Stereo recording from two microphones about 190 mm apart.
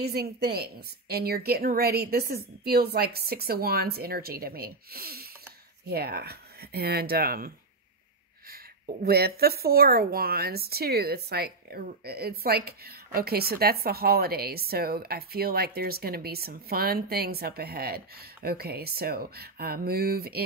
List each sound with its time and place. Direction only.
0.0 s a woman's voice: 55° right (ahead or behind)
9.0 s speech: 55° right (ahead or behind)